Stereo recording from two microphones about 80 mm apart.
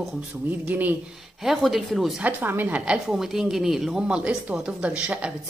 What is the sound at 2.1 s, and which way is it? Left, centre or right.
Speech, centre.